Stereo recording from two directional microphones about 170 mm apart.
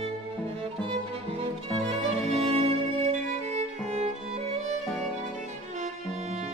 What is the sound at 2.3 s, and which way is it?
Music, 35° right (ahead or behind).